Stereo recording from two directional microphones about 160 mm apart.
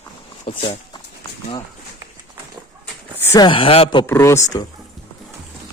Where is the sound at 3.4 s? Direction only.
30° left (ahead or behind).